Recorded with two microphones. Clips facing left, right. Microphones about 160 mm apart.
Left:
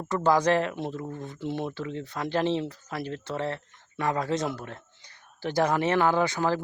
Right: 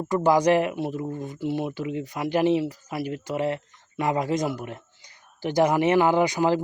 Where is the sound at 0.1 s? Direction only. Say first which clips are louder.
Right 3 dB; 15° right (ahead or behind).